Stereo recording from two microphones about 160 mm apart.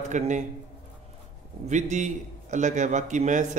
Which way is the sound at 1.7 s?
50° right (ahead or behind).